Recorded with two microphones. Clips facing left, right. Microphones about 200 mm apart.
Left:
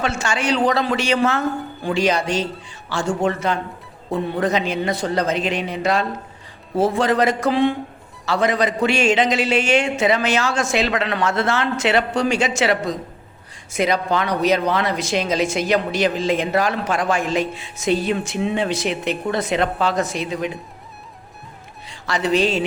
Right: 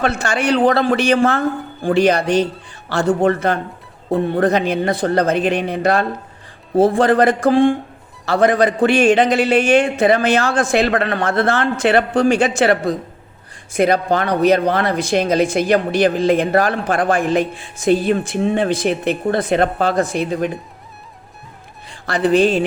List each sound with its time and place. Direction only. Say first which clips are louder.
0.0 s speech: right 4 dB; 60° right (ahead or behind)
21.8 s speech: right 4 dB; 55° right (ahead or behind)